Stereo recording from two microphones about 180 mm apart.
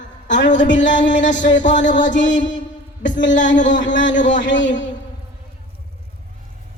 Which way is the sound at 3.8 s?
90° left.